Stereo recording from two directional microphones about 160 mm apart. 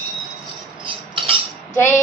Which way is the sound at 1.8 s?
15° left (ahead or behind).